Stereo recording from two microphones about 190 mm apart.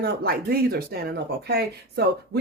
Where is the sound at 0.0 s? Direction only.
55° right (ahead or behind).